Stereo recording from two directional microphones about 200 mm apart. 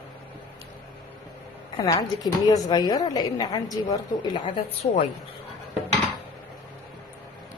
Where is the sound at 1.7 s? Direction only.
20° left (ahead or behind).